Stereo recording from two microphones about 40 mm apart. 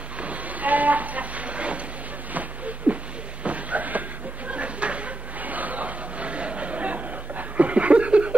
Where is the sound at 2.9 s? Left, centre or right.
Right.